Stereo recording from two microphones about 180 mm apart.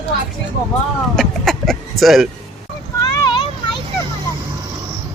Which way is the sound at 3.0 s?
25° left (ahead or behind).